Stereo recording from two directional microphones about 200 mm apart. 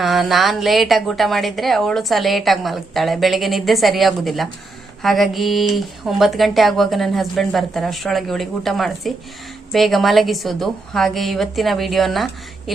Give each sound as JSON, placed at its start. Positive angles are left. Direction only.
{"t": 0.0, "sound": "a woman's voice", "side_deg": 0}